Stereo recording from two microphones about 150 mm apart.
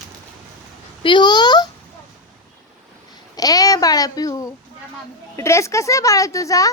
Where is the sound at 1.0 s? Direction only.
30° left (ahead or behind).